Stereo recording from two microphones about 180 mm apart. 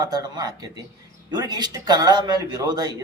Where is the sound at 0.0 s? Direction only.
20° right (ahead or behind).